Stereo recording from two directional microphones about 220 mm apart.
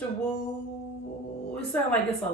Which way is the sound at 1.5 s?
5° left (ahead or behind).